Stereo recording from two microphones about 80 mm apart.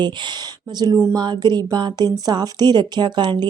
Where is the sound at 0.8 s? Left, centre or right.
Right.